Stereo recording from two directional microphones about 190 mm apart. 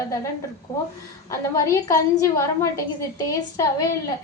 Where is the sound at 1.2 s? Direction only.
15° left (ahead or behind).